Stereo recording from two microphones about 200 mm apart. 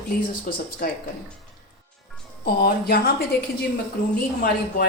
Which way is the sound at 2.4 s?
50° left (ahead or behind).